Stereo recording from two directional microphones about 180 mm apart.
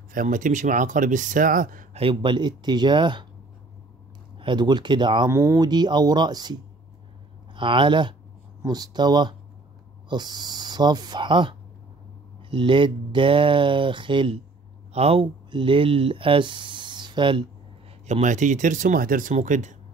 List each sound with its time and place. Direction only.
0.1 s speech: 50° right (ahead or behind)
2.0 s speech: 30° right (ahead or behind)
4.4 s speech: 25° right (ahead or behind)
5.3 s speech: 15° right (ahead or behind)
18.0 s speech: 40° right (ahead or behind)